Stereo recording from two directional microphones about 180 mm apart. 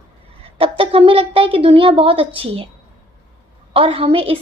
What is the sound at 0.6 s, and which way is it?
A woman's voice, 30° right (ahead or behind).